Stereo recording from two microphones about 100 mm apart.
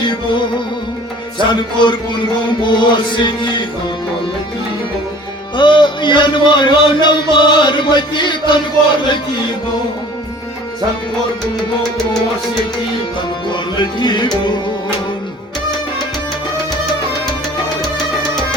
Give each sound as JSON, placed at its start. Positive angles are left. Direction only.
{"t": 0.0, "sound": "music", "side_deg": 50}
{"t": 1.4, "sound": "a man's voice", "side_deg": 55}
{"t": 5.5, "sound": "a man's voice", "side_deg": 50}
{"t": 13.5, "sound": "a man's voice", "side_deg": 50}